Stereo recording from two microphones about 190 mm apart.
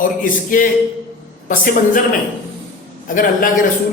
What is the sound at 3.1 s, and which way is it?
Speech, 45° left (ahead or behind).